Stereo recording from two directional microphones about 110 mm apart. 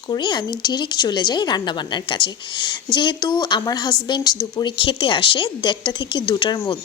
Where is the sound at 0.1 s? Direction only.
40° left (ahead or behind).